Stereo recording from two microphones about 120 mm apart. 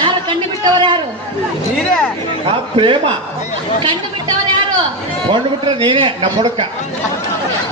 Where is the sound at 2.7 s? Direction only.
45° right (ahead or behind).